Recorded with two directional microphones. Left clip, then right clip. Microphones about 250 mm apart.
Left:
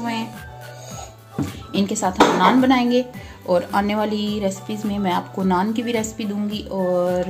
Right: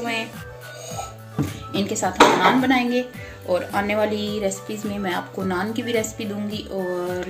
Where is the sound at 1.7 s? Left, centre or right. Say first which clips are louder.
Even; left.